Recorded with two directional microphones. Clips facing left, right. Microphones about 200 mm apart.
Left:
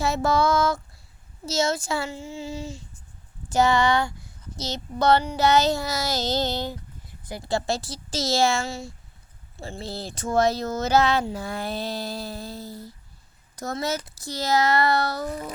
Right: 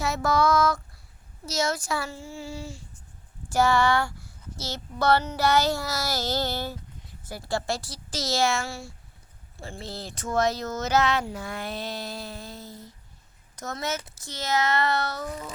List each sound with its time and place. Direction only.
0.0 s speech: 30° left (ahead or behind)